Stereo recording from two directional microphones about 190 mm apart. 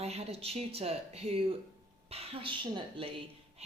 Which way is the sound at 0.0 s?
35° right (ahead or behind).